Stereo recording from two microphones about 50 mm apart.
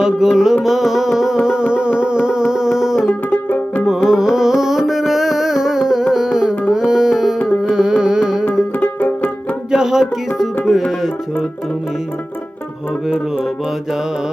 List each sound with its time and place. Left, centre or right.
0.0 s music: centre
3.8 s carnatic music: centre
9.0 s music: left
9.7 s music: centre